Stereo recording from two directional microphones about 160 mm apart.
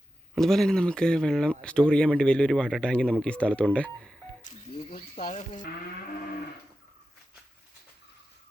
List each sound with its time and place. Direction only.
0.3 s speech: centre (ahead or behind)
4.9 s speech: 55° left (ahead or behind)